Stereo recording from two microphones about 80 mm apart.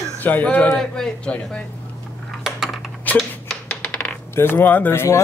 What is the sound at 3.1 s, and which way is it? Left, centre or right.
Typewriter, left.